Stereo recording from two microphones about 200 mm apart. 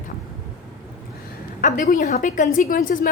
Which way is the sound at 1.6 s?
40° left (ahead or behind).